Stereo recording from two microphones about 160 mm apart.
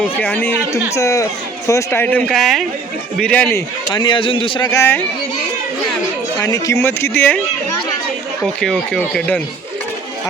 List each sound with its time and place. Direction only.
0.0 s speech: 10° left (ahead or behind)
3.9 s speech: 30° left (ahead or behind)
6.4 s speech: 20° left (ahead or behind)
8.6 s speech: 5° left (ahead or behind)